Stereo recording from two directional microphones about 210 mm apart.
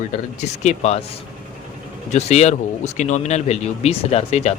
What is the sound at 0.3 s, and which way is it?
Speech, 30° left (ahead or behind).